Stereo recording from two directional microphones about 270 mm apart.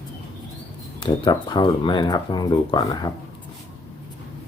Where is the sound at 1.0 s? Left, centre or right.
Centre.